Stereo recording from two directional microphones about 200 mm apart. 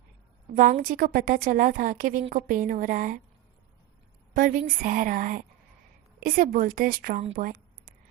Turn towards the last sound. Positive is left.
turn(degrees=-40)  # may be behind; listen again after turning